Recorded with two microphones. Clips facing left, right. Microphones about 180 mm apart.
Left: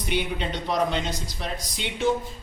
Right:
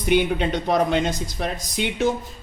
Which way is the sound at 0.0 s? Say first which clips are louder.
Right 8 dB; 50° right (ahead or behind).